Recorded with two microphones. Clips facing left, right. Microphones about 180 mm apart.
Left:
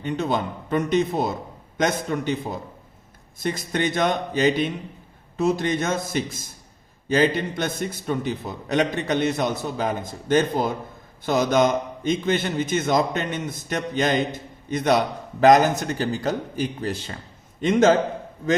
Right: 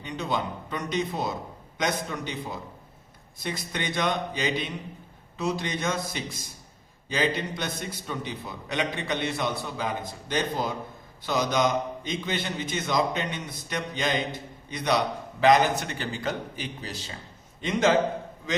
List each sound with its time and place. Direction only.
0.0 s a man's voice: 50° left (ahead or behind)